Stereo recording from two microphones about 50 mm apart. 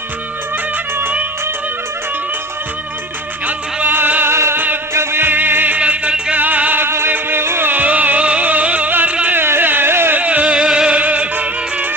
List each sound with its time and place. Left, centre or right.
3.4 s music: right
3.9 s music: right
4.3 s music: right
4.5 s music: right
6.8 s music: right
7.1 s music: right
7.4 s music: right
7.7 s music: right
8.9 s music: right
9.2 s a sound: right
10.2 s middle eastern music: right
10.4 s music: centre